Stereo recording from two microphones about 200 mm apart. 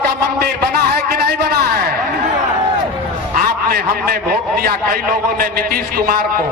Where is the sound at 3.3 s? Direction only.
50° right (ahead or behind).